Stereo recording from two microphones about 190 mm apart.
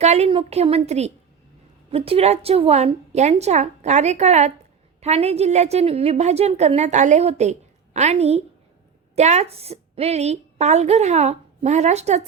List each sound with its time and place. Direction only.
0.0 s a woman's voice: 35° right (ahead or behind)